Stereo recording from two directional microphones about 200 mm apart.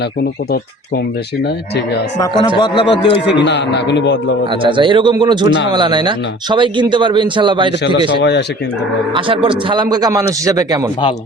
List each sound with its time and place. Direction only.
2.6 s a man's voice: 25° left (ahead or behind)
3.4 s a man's voice: 60° left (ahead or behind)
4.6 s speech: 25° right (ahead or behind)
8.2 s a man's voice: 60° left (ahead or behind)
9.1 s speech: 25° right (ahead or behind)